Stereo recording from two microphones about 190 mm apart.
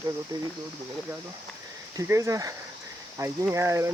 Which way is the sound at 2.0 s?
15° right (ahead or behind).